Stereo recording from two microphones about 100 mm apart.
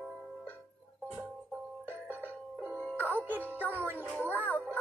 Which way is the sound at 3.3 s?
20° right (ahead or behind).